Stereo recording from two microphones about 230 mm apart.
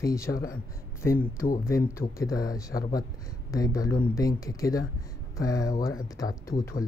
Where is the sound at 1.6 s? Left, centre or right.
Centre.